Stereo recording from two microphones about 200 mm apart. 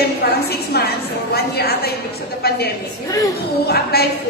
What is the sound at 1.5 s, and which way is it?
Speech, 50° left (ahead or behind).